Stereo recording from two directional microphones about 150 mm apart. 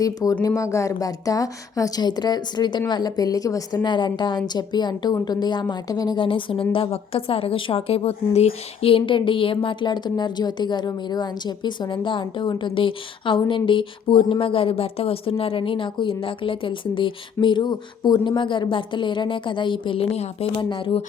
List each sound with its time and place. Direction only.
0.0 s a woman's voice: 25° left (ahead or behind)